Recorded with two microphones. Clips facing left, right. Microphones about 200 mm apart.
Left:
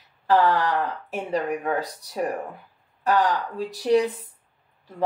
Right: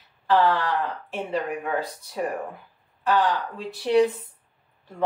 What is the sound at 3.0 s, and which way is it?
Speech, 40° left (ahead or behind).